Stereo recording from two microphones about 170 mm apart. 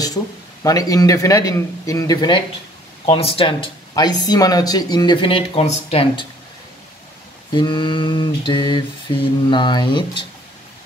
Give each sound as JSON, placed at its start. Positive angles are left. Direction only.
{"t": 0.7, "sound": "speech", "side_deg": 20}
{"t": 7.5, "sound": "speech", "side_deg": 30}